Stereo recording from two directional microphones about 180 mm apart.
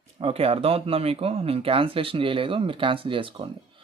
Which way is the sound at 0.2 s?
35° right (ahead or behind).